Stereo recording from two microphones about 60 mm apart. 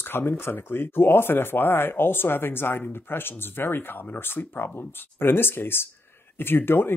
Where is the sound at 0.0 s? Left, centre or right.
Left.